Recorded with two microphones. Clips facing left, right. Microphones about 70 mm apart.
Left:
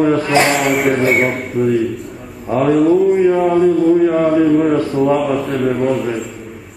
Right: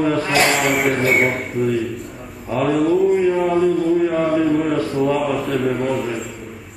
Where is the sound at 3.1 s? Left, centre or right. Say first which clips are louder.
Left 4 dB; centre.